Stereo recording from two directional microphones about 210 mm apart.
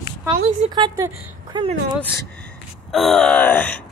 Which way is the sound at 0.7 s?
15° right (ahead or behind).